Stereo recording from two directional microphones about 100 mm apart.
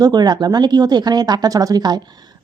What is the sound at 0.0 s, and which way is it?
A woman's voice, 45° right (ahead or behind).